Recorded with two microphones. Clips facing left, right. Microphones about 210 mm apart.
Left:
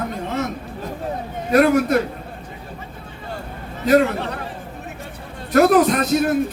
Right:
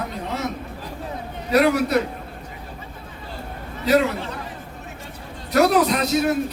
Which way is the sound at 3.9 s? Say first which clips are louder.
Left 3 dB; 55° left (ahead or behind).